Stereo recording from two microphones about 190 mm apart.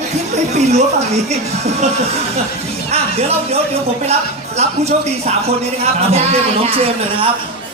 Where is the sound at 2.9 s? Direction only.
35° right (ahead or behind).